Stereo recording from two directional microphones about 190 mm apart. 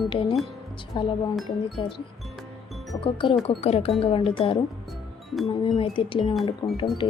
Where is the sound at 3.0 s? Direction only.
25° left (ahead or behind).